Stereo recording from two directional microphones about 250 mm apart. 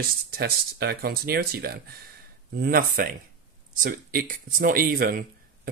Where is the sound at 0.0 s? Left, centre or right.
Right.